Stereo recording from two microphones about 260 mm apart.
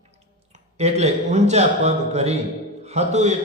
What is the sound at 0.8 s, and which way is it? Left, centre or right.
A man's voice, right.